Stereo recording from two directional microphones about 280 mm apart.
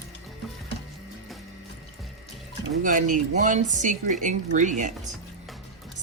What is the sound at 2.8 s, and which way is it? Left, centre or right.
Speech, right.